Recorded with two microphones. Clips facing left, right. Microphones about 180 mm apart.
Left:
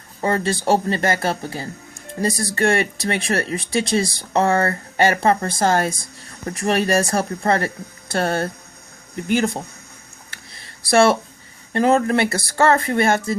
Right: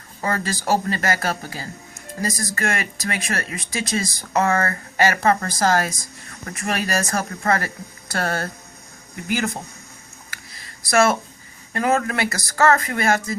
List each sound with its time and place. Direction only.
0.2 s speech: 25° left (ahead or behind)
10.3 s a sound: 30° left (ahead or behind)
11.7 s speech: 30° left (ahead or behind)